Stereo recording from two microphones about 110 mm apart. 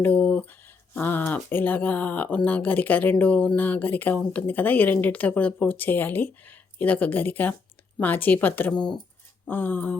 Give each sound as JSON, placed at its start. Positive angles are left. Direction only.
{"t": 0.0, "sound": "speech", "side_deg": 10}
{"t": 8.7, "sound": "speech", "side_deg": 5}
{"t": 9.5, "sound": "speech", "side_deg": 15}